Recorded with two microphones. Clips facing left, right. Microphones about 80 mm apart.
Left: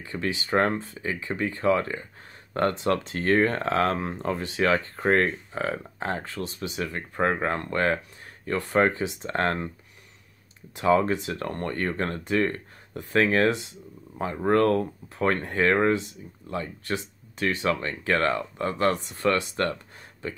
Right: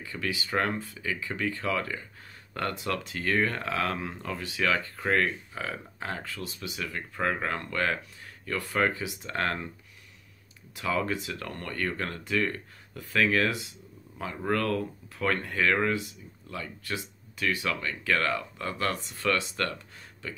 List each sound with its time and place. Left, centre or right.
0.0 s speech: left
10.8 s speech: left